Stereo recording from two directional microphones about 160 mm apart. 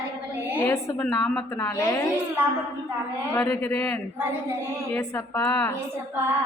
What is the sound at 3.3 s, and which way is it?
Speech, 15° left (ahead or behind).